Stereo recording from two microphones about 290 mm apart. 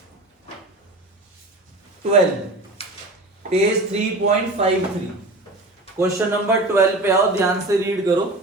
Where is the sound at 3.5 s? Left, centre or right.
Right.